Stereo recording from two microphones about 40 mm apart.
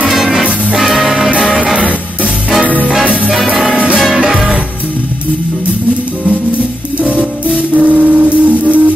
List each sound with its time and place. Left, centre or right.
0.1 s music: centre
3.7 s music: right
7.5 s music: right